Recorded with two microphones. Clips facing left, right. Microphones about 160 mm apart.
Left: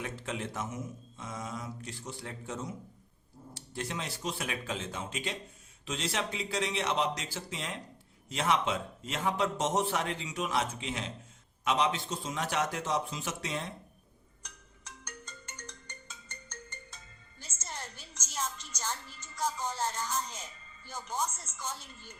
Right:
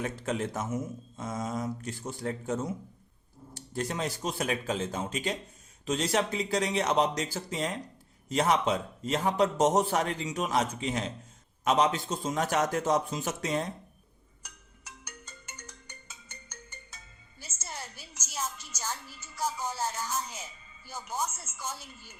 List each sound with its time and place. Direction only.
0.0 s speech: 45° right (ahead or behind)
14.4 s music: 10° right (ahead or behind)